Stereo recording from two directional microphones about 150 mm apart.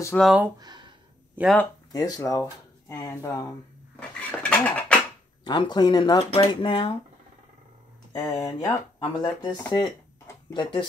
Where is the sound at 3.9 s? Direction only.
10° left (ahead or behind).